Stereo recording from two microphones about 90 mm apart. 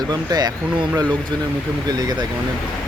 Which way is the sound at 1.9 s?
50° right (ahead or behind).